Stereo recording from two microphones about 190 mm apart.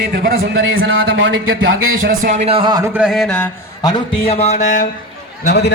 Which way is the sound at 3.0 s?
Centre (ahead or behind).